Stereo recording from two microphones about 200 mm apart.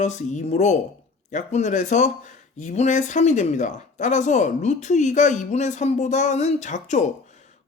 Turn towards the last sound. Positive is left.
turn(degrees=35)  # may be behind; listen again after turning